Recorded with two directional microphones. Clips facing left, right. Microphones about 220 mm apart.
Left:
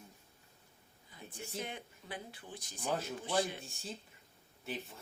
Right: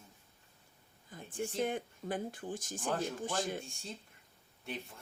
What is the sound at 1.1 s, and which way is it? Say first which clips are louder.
Speech: right 7 dB; 50° right (ahead or behind).